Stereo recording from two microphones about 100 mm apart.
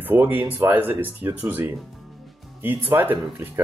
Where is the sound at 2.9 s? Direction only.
20° right (ahead or behind).